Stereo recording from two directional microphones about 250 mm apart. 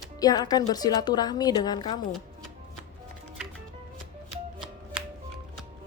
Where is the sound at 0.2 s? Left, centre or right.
Centre.